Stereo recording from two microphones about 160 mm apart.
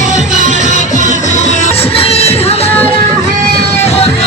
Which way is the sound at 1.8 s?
35° left (ahead or behind).